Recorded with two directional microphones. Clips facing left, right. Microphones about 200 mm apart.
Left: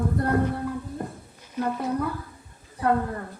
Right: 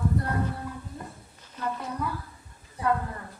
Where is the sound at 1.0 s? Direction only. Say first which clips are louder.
Left 8 dB; 55° left (ahead or behind).